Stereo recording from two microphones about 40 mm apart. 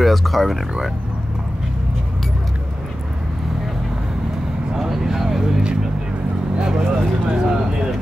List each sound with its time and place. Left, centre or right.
0.0 s speech: centre
4.7 s speech: centre
5.4 s speech: right